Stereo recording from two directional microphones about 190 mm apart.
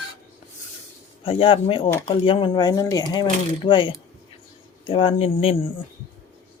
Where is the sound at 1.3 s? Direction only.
30° left (ahead or behind).